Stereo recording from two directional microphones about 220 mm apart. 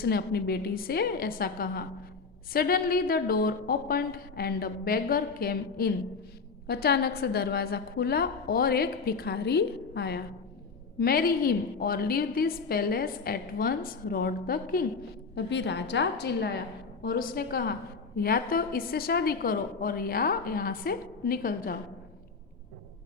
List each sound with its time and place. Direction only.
0.0 s a woman's voice: 45° left (ahead or behind)